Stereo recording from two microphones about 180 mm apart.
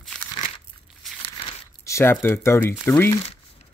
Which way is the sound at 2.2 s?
15° left (ahead or behind).